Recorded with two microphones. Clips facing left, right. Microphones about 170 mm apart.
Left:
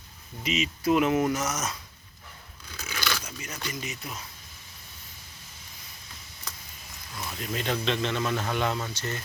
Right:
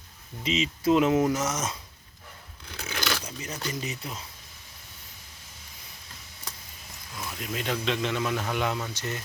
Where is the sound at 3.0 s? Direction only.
30° right (ahead or behind).